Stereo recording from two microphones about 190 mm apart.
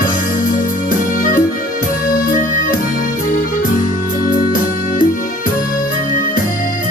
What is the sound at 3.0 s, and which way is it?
Music, 45° left (ahead or behind).